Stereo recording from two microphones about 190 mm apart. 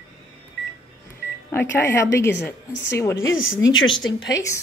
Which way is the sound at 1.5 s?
10° left (ahead or behind).